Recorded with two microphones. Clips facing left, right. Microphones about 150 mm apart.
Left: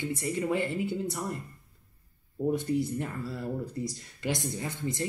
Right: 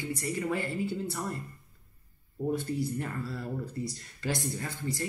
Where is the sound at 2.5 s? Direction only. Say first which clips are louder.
Left 3 dB; 20° left (ahead or behind).